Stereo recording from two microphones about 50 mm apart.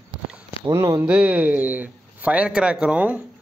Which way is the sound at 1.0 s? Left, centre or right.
Right.